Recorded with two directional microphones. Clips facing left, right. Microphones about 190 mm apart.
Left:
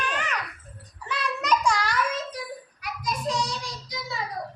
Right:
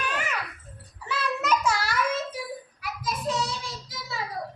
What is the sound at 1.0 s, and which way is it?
Child singing, 5° right (ahead or behind).